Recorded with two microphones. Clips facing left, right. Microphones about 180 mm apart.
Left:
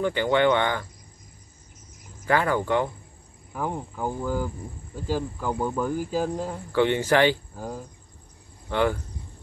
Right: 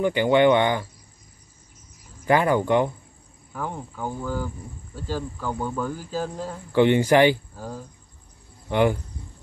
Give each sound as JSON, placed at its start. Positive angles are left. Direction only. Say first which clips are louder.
{"t": 0.0, "sound": "speech", "louder": "right 3 dB", "side_deg": -15}
{"t": 2.2, "sound": "speech", "louder": "right 3 dB", "side_deg": -15}
{"t": 3.5, "sound": "speech", "louder": "left 2 dB", "side_deg": 10}
{"t": 6.7, "sound": "speech", "louder": "right 4 dB", "side_deg": -15}
{"t": 7.5, "sound": "speech", "louder": "left 1 dB", "side_deg": 15}
{"t": 8.6, "sound": "speech", "louder": "right 3 dB", "side_deg": -15}